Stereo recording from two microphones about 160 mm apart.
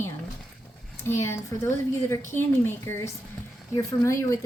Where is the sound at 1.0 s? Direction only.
15° left (ahead or behind).